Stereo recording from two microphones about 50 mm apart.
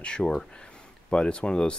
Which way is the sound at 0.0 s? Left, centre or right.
Centre.